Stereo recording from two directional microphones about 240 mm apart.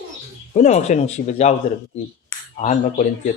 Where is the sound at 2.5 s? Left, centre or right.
Left.